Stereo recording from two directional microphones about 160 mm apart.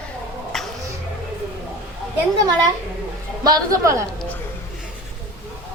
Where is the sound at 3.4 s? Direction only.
20° right (ahead or behind).